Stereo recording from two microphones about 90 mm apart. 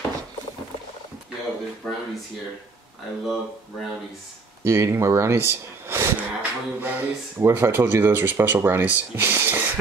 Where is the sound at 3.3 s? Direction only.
Centre (ahead or behind).